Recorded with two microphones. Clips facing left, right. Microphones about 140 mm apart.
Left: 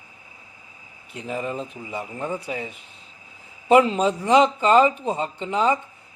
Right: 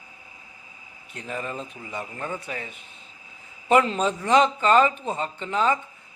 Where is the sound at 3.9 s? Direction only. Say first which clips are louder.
Left 2 dB; 15° left (ahead or behind).